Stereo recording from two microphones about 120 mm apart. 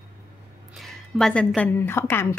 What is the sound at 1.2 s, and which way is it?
A woman's voice, 5° left (ahead or behind).